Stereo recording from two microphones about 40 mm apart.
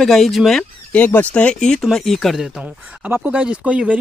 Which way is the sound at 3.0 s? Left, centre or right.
Right.